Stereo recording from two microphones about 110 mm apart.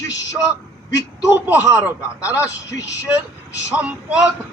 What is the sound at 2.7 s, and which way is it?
Speech, 30° left (ahead or behind).